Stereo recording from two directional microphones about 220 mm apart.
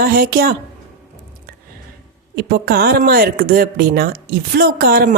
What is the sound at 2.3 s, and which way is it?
Speech, 45° right (ahead or behind).